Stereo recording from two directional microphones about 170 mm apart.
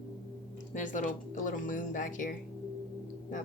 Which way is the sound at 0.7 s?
50° left (ahead or behind).